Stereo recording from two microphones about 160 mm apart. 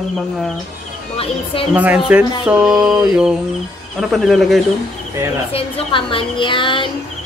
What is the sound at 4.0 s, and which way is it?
Speech, centre (ahead or behind).